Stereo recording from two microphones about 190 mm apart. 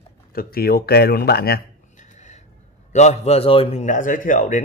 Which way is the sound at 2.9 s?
35° left (ahead or behind).